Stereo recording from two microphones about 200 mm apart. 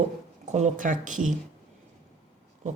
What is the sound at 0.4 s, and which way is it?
Speech, 35° right (ahead or behind).